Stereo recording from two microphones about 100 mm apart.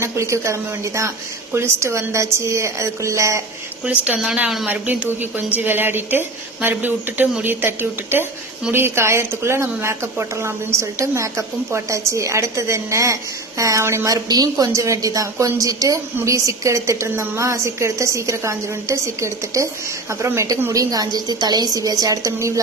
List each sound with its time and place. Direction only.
0.0 s a woman's voice: 30° right (ahead or behind)
3.8 s a woman's voice: 10° right (ahead or behind); by 22.6 s 30° right (ahead or behind)